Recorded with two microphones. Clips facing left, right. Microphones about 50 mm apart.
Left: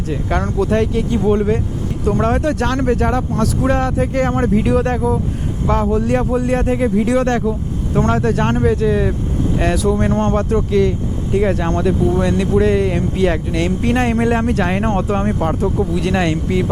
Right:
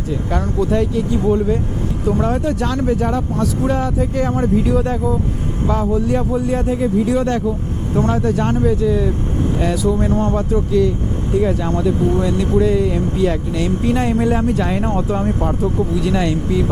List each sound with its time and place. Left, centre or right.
0.3 s speech: left